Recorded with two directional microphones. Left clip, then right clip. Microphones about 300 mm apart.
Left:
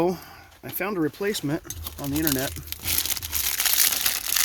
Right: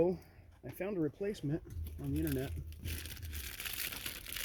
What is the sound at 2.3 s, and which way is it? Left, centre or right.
Crumpling, centre.